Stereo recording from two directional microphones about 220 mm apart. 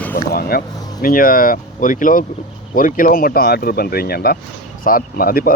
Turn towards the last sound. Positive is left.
turn(degrees=40)  # may be behind; listen again after turning